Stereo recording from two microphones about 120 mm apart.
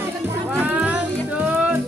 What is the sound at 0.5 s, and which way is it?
Music, 10° right (ahead or behind).